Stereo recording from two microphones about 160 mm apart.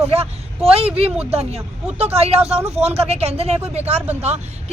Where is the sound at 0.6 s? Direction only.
40° right (ahead or behind).